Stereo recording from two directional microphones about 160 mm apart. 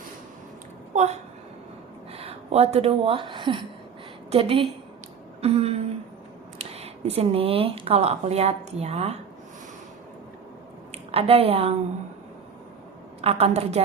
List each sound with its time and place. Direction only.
0.9 s a woman's voice: 45° right (ahead or behind)
5.4 s a sound: 40° right (ahead or behind)
6.6 s speech: 40° right (ahead or behind)
10.9 s a woman's voice: 40° right (ahead or behind)
13.2 s speech: 40° right (ahead or behind)